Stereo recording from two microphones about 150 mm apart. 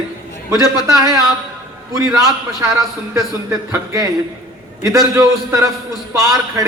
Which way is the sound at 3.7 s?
20° right (ahead or behind).